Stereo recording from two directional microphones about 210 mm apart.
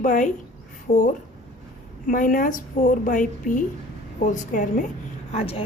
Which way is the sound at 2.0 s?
40° left (ahead or behind).